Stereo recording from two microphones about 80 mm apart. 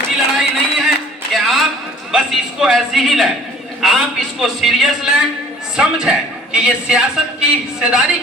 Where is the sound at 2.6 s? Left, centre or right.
Centre.